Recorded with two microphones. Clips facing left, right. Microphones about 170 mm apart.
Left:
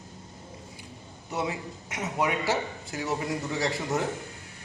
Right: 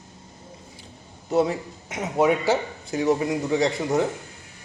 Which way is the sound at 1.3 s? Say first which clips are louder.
Right 9 dB; 30° right (ahead or behind).